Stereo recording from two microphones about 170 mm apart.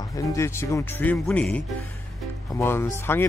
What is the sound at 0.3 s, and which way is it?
Speech, 15° left (ahead or behind).